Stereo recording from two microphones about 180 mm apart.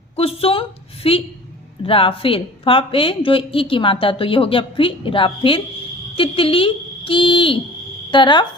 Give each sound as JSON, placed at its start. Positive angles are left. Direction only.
{"t": 0.2, "sound": "a woman's voice", "side_deg": 30}